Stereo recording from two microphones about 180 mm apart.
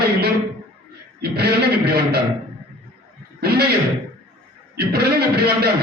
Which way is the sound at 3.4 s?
60° right (ahead or behind).